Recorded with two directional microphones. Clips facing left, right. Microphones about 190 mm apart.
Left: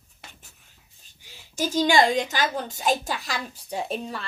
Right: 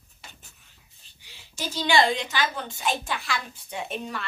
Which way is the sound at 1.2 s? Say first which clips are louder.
Left 7 dB; 45° left (ahead or behind).